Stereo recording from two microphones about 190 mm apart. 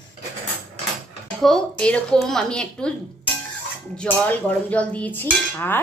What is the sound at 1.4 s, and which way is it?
A woman's voice, centre (ahead or behind).